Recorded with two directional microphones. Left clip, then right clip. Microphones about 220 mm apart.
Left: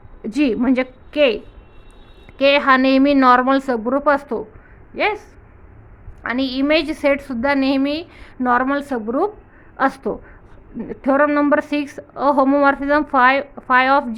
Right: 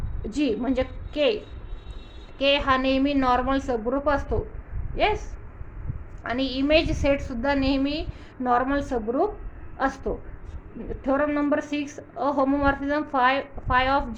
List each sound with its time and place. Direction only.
0.2 s a woman's voice: 50° left (ahead or behind)
2.4 s a woman's voice: 50° left (ahead or behind)
6.2 s a woman's voice: 50° left (ahead or behind)